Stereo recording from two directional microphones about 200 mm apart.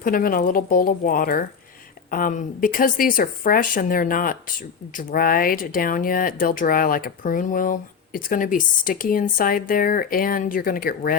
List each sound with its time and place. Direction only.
0.0 s speech: 45° left (ahead or behind)